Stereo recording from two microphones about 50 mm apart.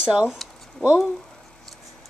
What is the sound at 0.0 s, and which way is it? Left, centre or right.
Speech, right.